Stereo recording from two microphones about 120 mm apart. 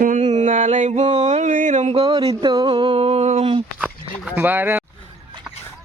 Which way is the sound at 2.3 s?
35° right (ahead or behind).